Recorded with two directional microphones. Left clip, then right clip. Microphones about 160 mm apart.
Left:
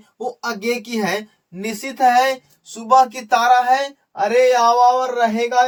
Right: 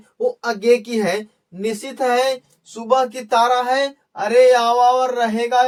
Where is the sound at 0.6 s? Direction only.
25° left (ahead or behind).